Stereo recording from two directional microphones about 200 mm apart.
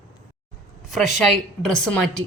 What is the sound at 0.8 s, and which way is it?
A woman's voice, centre (ahead or behind).